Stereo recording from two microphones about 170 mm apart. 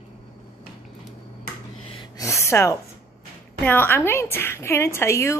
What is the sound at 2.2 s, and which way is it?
Speech, 15° left (ahead or behind).